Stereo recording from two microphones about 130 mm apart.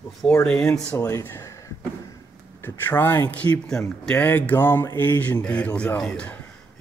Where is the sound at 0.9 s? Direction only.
20° left (ahead or behind).